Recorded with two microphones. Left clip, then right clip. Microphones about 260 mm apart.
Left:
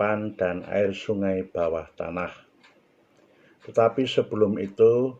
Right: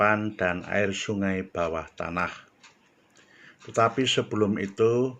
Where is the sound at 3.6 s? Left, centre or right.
Right.